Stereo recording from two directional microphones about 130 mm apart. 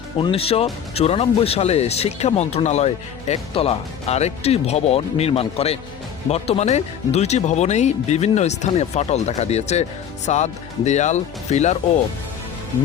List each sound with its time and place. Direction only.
0.2 s speech: 45° left (ahead or behind); by 11.8 s 60° left (ahead or behind)